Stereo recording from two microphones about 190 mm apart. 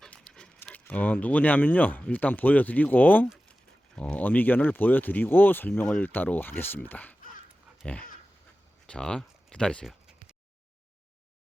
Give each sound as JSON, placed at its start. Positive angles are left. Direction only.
{"t": 0.0, "sound": "speech", "side_deg": 5}
{"t": 7.2, "sound": "dog", "side_deg": 45}
{"t": 8.9, "sound": "speech", "side_deg": 5}